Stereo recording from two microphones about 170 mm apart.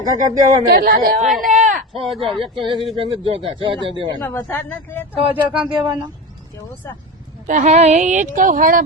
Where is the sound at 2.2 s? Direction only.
30° right (ahead or behind).